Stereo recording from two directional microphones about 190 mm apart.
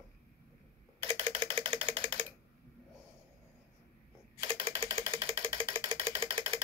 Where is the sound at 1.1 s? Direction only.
10° left (ahead or behind).